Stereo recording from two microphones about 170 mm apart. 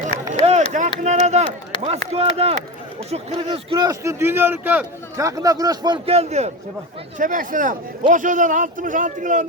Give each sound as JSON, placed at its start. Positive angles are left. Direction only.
{"t": 0.3, "sound": "a sound", "side_deg": -40}
{"t": 0.7, "sound": "a man's voice", "side_deg": -45}
{"t": 5.2, "sound": "a man's voice", "side_deg": -20}
{"t": 7.2, "sound": "a man's voice", "side_deg": -50}